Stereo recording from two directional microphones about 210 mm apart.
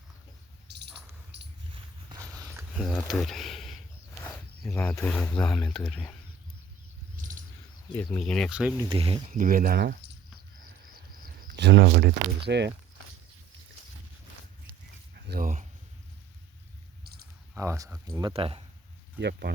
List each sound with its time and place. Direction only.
0.7 s a sound: 55° right (ahead or behind)
1.3 s mouse: 55° right (ahead or behind)
1.7 s a sound: 15° right (ahead or behind)
2.7 s speech: centre (ahead or behind)
7.2 s a sound: 40° right (ahead or behind)
7.9 s speech: 5° left (ahead or behind)
8.8 s speech: 25° right (ahead or behind); by 9.9 s 45° right (ahead or behind)
11.4 s speech: 55° right (ahead or behind)
15.3 s speech: 40° right (ahead or behind)
17.5 s speech: 15° right (ahead or behind)
18.2 s speech: 25° right (ahead or behind)
19.2 s speech: 50° right (ahead or behind)